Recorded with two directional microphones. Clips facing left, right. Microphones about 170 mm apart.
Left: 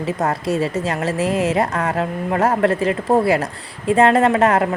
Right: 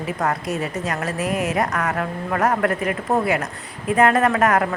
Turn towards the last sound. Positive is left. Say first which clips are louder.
# left 3 dB
turn(degrees=25)  # may be behind; listen again after turning